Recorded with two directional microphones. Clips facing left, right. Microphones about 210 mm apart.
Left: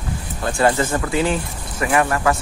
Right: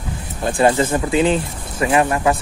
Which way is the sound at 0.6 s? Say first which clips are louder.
Right 2 dB; 25° right (ahead or behind).